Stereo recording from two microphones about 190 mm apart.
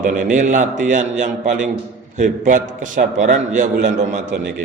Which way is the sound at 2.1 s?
40° right (ahead or behind).